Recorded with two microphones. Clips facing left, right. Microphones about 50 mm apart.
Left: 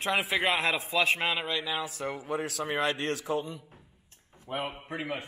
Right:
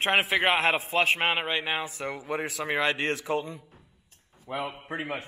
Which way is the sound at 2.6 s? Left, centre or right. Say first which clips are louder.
Right 4 dB; right.